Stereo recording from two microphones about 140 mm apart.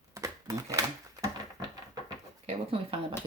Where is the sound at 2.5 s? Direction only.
45° right (ahead or behind).